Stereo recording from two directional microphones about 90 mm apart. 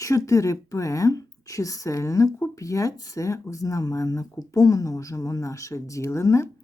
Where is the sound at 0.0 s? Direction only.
35° left (ahead or behind).